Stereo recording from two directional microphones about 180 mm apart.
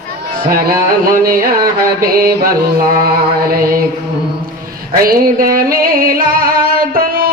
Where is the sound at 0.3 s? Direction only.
55° right (ahead or behind).